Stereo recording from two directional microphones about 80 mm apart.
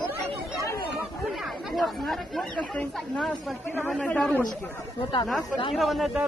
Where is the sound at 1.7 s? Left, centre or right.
Centre.